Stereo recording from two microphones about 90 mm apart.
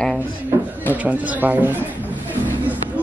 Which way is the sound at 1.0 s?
20° right (ahead or behind).